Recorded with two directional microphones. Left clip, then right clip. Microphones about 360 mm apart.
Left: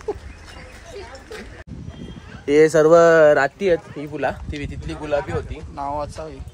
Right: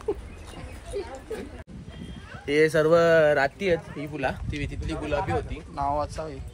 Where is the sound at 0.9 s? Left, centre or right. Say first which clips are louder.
Right 4 dB; right.